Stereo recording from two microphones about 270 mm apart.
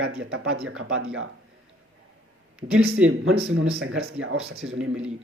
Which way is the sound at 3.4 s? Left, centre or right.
Right.